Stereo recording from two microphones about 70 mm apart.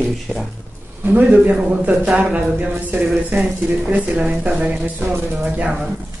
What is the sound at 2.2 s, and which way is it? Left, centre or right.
Speech, right.